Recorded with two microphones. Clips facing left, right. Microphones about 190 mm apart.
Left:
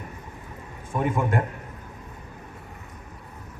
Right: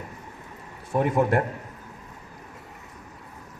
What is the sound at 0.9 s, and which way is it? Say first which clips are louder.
Speech: right 3 dB; 35° right (ahead or behind).